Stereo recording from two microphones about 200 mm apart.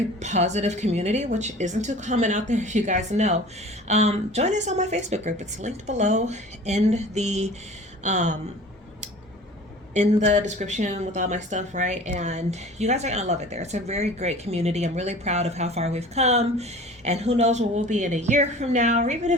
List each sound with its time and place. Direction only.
0.2 s speech: 35° right (ahead or behind)
9.9 s speech: 35° right (ahead or behind)